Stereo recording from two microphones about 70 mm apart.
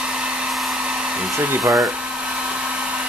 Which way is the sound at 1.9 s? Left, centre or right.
Centre.